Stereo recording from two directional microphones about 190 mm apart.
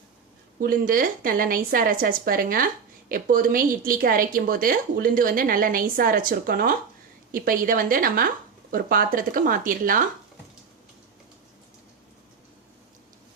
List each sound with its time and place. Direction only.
0.6 s speech: 50° right (ahead or behind)